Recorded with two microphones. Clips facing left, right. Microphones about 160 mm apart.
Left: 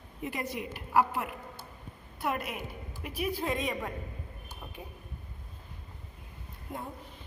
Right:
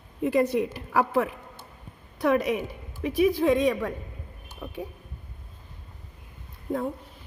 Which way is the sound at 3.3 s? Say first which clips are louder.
Right 10 dB; 90° right.